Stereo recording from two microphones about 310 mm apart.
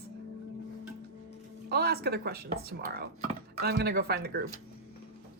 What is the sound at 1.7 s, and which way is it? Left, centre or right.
Speech, right.